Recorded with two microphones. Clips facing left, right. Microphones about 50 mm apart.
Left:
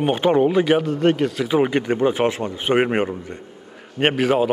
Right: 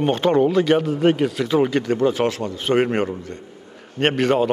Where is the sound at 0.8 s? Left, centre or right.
Centre.